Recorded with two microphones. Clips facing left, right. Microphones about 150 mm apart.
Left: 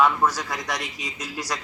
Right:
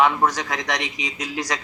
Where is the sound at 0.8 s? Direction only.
90° right.